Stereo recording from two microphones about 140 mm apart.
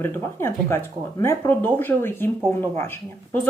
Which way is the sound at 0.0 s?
15° left (ahead or behind).